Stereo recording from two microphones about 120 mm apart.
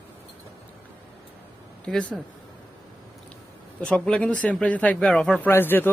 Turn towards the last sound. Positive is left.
turn(degrees=15)  # may be behind; listen again after turning